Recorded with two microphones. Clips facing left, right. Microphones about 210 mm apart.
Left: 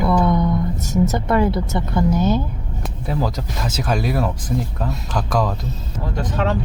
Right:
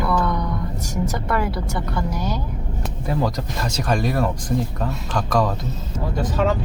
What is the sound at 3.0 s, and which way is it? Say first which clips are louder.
Speech: even; 5° left (ahead or behind).